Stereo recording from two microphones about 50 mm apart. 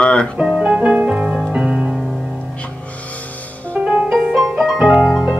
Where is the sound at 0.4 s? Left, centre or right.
Centre.